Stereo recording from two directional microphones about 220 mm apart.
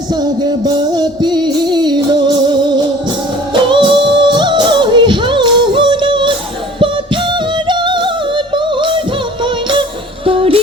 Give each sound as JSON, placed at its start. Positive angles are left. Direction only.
{"t": 0.1, "sound": "music", "side_deg": -20}
{"t": 6.7, "sound": "yodeling", "side_deg": -20}
{"t": 9.4, "sound": "music", "side_deg": -20}